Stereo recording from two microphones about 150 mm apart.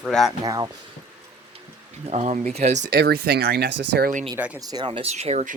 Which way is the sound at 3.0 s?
90° right.